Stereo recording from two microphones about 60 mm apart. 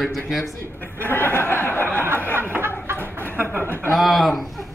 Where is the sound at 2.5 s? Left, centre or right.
Right.